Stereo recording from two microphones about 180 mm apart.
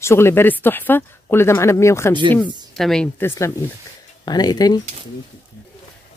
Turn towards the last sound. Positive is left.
turn(degrees=20)  # may be behind; listen again after turning